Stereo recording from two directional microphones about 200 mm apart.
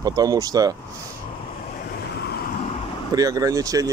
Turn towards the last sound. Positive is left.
turn(degrees=-15)  # may be behind; listen again after turning